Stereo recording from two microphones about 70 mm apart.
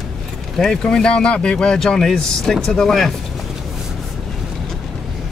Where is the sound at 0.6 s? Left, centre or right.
Centre.